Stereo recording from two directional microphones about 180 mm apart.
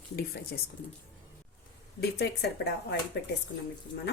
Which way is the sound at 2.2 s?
65° left (ahead or behind).